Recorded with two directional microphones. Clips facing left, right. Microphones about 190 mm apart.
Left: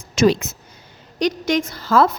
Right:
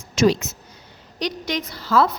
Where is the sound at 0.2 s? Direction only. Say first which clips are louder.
Left 2 dB; 55° left (ahead or behind).